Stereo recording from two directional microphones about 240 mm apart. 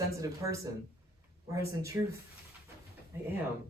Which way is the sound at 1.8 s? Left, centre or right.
Centre.